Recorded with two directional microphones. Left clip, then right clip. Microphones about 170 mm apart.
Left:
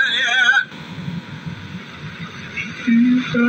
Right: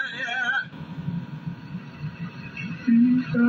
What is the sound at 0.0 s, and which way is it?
Music, 30° left (ahead or behind).